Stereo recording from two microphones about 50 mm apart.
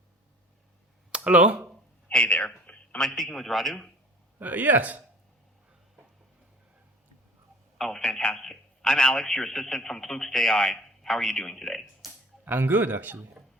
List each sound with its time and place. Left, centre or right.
1.1 s speech: right
2.0 s a sound: left
3.2 s a man's voice: centre
4.4 s speech: right
7.8 s a man's voice: centre
12.5 s speech: right